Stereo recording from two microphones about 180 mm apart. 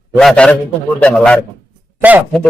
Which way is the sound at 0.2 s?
5° left (ahead or behind).